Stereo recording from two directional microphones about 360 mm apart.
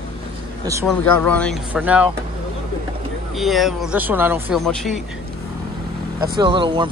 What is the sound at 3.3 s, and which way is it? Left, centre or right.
A man's voice, centre.